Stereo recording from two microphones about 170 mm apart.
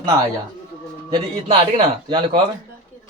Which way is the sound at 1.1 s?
25° right (ahead or behind).